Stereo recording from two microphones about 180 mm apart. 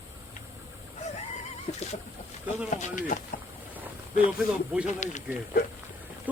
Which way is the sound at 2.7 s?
45° left (ahead or behind).